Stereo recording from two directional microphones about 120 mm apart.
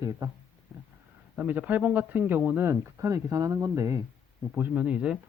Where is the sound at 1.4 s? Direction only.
15° right (ahead or behind).